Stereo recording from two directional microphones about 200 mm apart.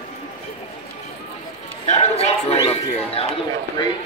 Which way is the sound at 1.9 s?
35° left (ahead or behind).